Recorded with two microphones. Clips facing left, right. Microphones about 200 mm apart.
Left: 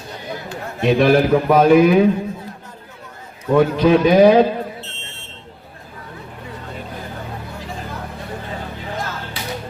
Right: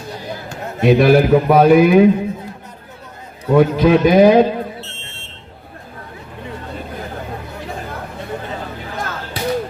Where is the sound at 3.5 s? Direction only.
5° right (ahead or behind).